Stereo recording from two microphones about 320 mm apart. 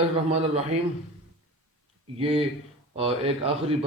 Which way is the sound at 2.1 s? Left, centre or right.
Centre.